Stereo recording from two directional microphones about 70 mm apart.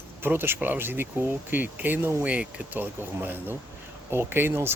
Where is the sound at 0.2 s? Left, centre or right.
Right.